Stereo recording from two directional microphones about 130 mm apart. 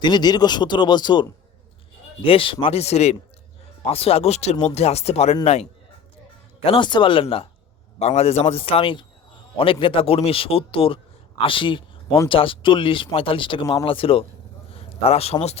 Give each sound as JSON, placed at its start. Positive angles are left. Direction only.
{"t": 0.0, "sound": "speech", "side_deg": 35}
{"t": 6.7, "sound": "speech", "side_deg": 40}
{"t": 7.9, "sound": "a man's voice", "side_deg": 55}